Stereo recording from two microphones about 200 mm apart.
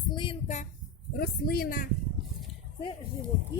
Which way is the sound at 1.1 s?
50° left (ahead or behind).